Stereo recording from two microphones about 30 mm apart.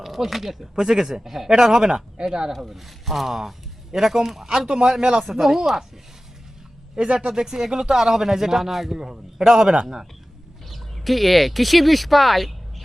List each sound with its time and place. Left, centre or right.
0.0 s speech: centre
0.8 s speech: centre
6.9 s speech: right
7.3 s speech: centre
10.7 s speech: centre